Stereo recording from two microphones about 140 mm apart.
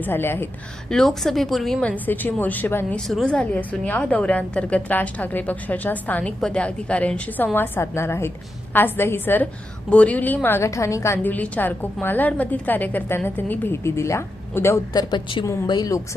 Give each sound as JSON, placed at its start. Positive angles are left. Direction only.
{"t": 0.0, "sound": "a woman's voice", "side_deg": 15}
{"t": 0.9, "sound": "a woman's voice", "side_deg": 5}
{"t": 14.9, "sound": "a woman's voice", "side_deg": 35}